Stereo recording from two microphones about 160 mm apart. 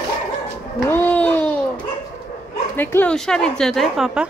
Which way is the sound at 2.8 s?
10° left (ahead or behind).